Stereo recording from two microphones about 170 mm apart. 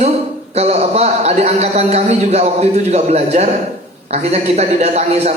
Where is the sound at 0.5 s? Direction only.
40° right (ahead or behind).